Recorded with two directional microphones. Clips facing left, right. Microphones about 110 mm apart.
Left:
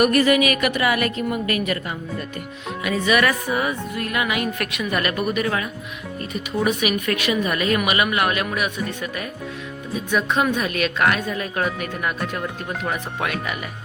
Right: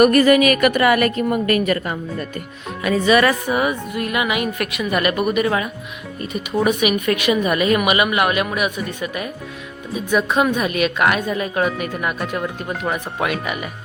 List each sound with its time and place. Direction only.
0.0 s a woman's voice: 45° right (ahead or behind); by 3.3 s 30° right (ahead or behind)
3.5 s a woman's voice: 15° right (ahead or behind)
6.7 s a woman's voice: 15° right (ahead or behind)